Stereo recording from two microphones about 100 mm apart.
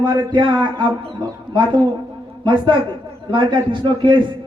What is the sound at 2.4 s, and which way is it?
A man's voice, 55° right (ahead or behind).